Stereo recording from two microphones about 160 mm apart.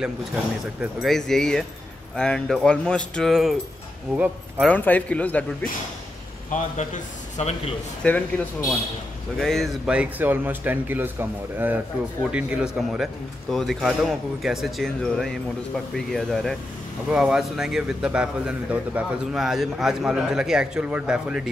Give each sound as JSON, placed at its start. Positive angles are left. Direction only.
{"t": 1.0, "sound": "a man's voice", "side_deg": 0}
{"t": 4.6, "sound": "speech", "side_deg": 10}
{"t": 6.5, "sound": "a man's voice", "side_deg": 50}
{"t": 8.0, "sound": "a man's voice", "side_deg": 10}